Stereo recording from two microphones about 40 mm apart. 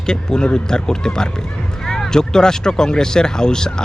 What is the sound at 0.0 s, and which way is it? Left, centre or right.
Speech, centre.